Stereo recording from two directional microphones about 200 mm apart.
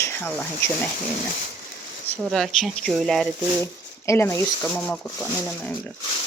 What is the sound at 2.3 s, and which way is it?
Speech, centre (ahead or behind).